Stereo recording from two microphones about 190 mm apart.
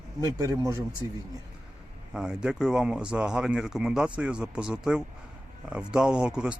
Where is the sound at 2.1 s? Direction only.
5° right (ahead or behind).